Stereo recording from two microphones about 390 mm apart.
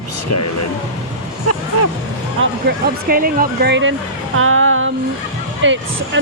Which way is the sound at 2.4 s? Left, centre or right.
Right.